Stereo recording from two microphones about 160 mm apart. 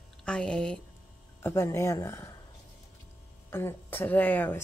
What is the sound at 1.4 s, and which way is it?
Speech, 15° left (ahead or behind).